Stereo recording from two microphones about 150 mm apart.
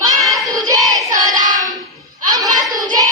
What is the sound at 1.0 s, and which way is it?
Child singing, 20° right (ahead or behind).